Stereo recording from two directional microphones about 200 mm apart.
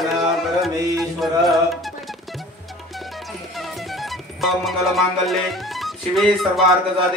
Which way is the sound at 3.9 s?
Centre (ahead or behind).